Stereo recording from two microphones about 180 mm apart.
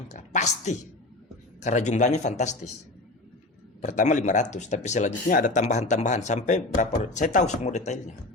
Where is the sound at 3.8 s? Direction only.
45° left (ahead or behind).